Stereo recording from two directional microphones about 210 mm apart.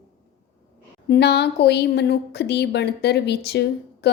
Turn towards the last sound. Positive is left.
turn(degrees=50)  # may be behind; listen again after turning